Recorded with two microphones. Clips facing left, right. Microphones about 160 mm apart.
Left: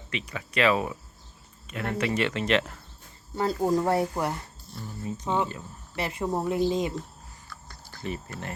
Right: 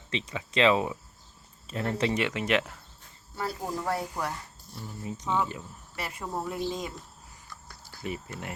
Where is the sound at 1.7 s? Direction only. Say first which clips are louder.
Even; 30° right (ahead or behind).